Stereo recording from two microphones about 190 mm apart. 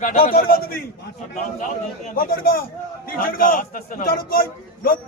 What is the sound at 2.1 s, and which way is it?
Speech, 50° left (ahead or behind).